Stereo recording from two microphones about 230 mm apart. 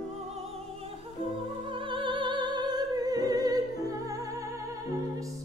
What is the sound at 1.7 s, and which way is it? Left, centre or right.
Opera, right.